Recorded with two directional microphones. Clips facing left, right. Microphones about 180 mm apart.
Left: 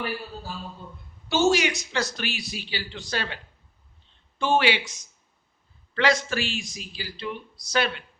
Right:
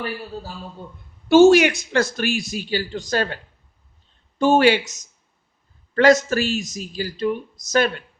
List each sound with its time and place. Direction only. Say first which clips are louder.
1.3 s a man's voice: right 10 dB; 55° right (ahead or behind)
5.9 s a man's voice: right 9 dB; 45° right (ahead or behind)